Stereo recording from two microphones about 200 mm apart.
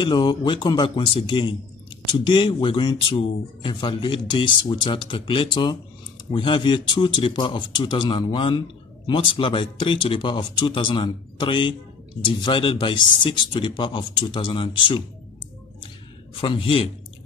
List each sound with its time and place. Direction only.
0.0 s speech: 20° left (ahead or behind)
16.3 s speech: 25° left (ahead or behind)